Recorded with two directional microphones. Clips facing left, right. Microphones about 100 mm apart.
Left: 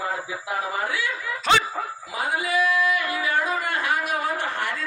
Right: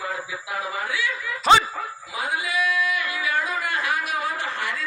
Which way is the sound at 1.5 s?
5° right (ahead or behind).